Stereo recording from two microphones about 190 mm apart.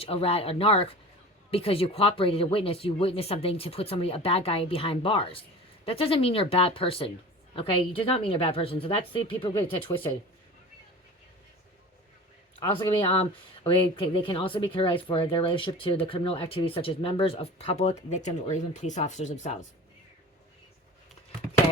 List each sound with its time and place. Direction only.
0.0 s speech: 30° left (ahead or behind)
12.5 s speech: 25° left (ahead or behind)